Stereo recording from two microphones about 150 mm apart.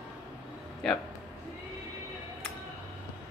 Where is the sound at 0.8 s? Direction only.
5° left (ahead or behind).